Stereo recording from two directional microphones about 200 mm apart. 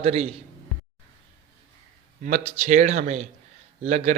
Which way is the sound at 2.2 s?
35° right (ahead or behind).